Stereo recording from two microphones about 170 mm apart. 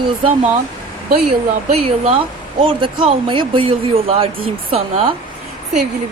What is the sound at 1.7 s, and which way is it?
Speech, 35° right (ahead or behind).